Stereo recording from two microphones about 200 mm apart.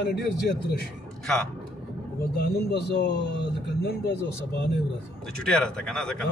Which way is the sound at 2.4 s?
55° left (ahead or behind).